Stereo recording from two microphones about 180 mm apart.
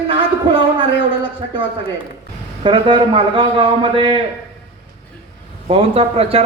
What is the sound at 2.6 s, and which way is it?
A man's voice, 30° right (ahead or behind).